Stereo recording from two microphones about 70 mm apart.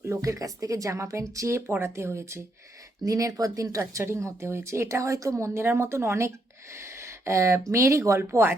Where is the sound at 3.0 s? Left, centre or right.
Right.